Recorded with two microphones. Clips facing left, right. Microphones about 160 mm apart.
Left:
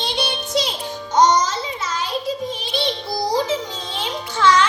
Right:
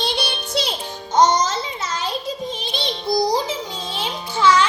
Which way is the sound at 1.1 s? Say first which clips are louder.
Even; 25° right (ahead or behind).